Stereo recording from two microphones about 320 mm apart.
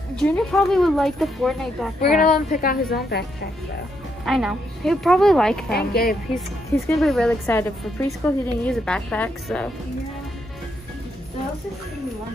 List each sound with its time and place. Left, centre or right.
0.1 s speech: centre
2.0 s a woman's voice: left
4.3 s speech: centre
5.7 s a woman's voice: left
6.3 s speech: centre